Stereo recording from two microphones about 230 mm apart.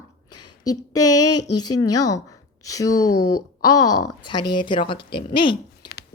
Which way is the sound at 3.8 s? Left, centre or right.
Left.